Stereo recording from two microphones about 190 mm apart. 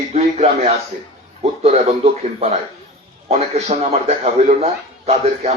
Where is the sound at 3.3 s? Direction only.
35° right (ahead or behind).